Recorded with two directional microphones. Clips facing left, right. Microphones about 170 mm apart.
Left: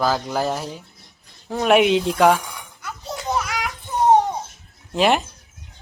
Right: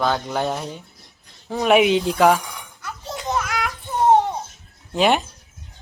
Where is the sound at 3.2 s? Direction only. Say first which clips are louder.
Even; 10° left (ahead or behind).